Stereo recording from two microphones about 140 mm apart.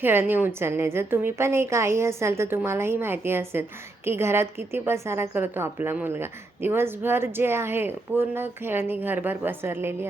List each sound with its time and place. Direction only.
0.0 s a woman's voice: 15° right (ahead or behind)